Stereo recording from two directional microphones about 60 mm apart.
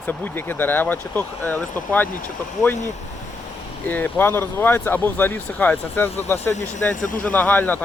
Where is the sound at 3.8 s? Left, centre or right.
Left.